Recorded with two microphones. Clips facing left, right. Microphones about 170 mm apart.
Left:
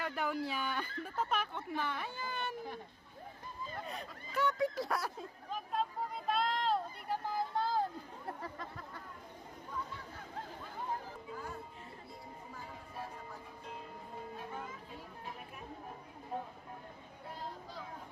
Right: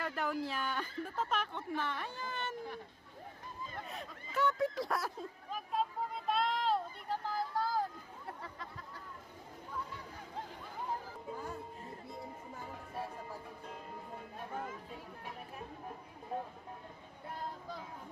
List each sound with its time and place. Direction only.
0.0 s speech: centre (ahead or behind)
3.8 s speech: centre (ahead or behind)
7.1 s speech: 20° left (ahead or behind)